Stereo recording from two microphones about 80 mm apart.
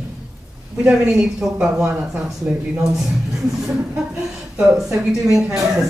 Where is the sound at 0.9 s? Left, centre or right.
Centre.